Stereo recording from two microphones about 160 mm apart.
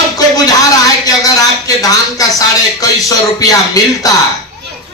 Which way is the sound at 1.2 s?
20° left (ahead or behind).